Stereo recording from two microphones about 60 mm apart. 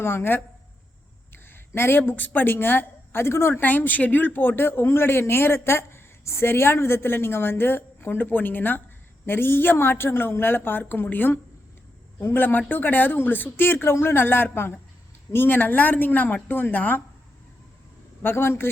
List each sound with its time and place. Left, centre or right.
0.0 s a woman's voice: left
18.2 s speech: left